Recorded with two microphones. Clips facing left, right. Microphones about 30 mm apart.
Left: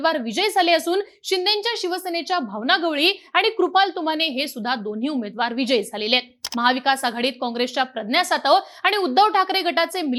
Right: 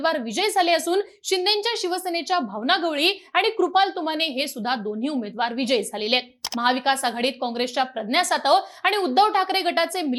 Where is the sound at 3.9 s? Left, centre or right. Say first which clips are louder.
Left 2 dB; centre.